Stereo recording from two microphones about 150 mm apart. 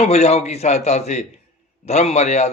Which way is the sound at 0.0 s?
45° left (ahead or behind).